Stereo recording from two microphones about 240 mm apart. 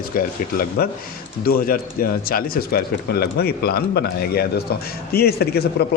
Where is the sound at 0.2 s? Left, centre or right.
Left.